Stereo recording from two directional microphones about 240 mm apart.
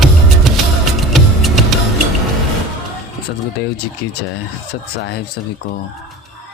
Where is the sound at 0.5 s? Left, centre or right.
Centre.